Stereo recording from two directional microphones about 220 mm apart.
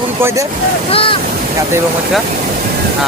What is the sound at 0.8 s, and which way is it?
Speech, 25° left (ahead or behind).